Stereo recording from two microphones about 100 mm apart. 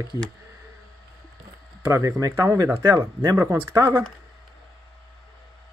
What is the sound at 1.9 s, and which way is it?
Speech, 30° right (ahead or behind).